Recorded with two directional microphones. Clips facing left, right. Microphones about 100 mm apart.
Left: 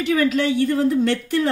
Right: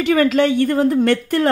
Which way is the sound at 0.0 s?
60° right (ahead or behind).